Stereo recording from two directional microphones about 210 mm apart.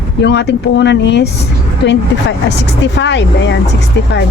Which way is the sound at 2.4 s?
55° left (ahead or behind).